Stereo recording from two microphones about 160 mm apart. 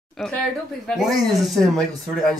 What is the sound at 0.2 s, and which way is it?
Speech, centre (ahead or behind).